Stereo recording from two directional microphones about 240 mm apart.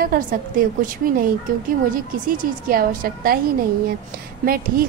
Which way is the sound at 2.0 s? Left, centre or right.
Right.